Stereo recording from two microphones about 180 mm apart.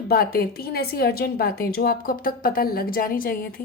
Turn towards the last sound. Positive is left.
turn(degrees=55)  # may be behind; listen again after turning